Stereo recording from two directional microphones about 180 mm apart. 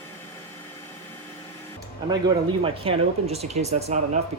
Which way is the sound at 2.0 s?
25° right (ahead or behind).